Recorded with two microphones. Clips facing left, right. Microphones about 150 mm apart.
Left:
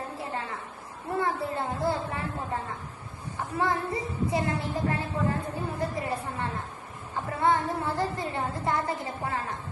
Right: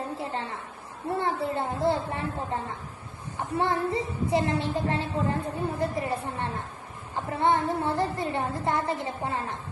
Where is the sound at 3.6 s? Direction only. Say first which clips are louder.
Right 2 dB; 25° right (ahead or behind).